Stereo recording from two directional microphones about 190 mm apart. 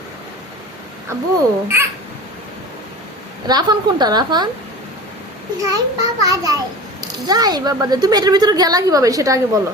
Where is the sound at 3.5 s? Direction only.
20° right (ahead or behind).